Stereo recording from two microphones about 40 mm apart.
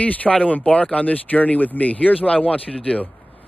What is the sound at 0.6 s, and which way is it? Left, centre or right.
Speech, left.